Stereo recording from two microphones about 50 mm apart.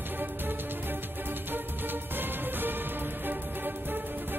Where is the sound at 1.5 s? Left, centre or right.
Right.